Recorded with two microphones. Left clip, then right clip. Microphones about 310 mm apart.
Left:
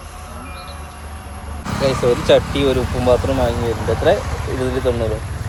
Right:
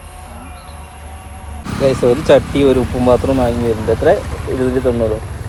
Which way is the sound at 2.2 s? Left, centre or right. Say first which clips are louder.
Right 3 dB; centre.